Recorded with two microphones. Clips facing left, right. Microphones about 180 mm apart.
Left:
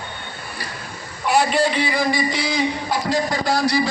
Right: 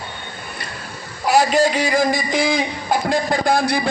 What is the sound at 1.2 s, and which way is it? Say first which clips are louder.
A man's voice: right 3 dB; 40° right (ahead or behind).